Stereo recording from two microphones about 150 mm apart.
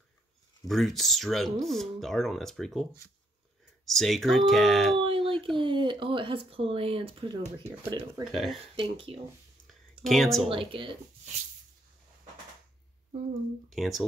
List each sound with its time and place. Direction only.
0.7 s speech: centre (ahead or behind)
4.9 s speech: 35° right (ahead or behind)
7.6 s speech: 20° right (ahead or behind)
8.2 s speech: centre (ahead or behind)
8.8 s speech: 35° right (ahead or behind)
10.0 s speech: centre (ahead or behind)
10.5 s speech: 35° right (ahead or behind)
13.7 s speech: centre (ahead or behind)